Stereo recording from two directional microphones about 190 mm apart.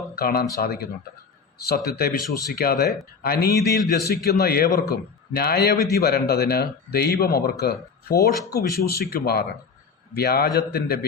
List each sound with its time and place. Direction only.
0.2 s a man's voice: 55° left (ahead or behind)